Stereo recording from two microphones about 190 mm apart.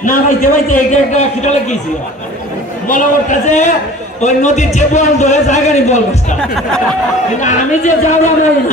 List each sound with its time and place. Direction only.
0.0 s a man's voice: 45° left (ahead or behind)
2.9 s a man's voice: 40° left (ahead or behind)
7.3 s a man's voice: 40° left (ahead or behind)